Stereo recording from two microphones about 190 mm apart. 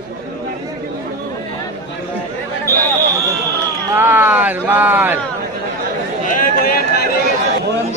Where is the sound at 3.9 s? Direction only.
10° right (ahead or behind).